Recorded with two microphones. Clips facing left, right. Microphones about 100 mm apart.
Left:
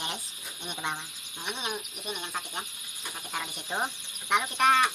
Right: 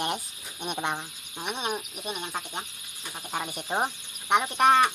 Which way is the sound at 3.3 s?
30° right (ahead or behind).